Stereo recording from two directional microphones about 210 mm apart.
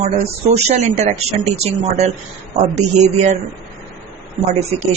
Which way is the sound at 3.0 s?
35° right (ahead or behind).